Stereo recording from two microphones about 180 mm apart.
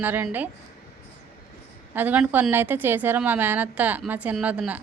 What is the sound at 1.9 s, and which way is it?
A woman's voice, 10° right (ahead or behind).